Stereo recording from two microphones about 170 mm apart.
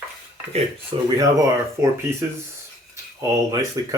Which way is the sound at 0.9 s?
30° right (ahead or behind).